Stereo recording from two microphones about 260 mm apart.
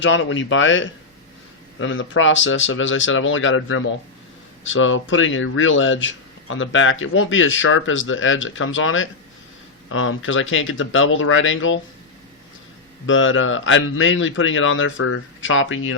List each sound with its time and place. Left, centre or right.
0.0 s speech: left
13.1 s speech: left